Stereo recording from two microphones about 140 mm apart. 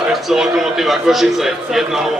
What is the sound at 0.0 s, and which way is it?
A man's voice, 5° right (ahead or behind).